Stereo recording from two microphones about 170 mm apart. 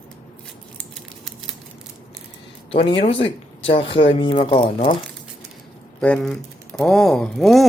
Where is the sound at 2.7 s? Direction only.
30° left (ahead or behind).